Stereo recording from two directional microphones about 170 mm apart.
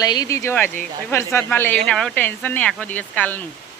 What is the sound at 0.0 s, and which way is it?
Speech, 20° left (ahead or behind).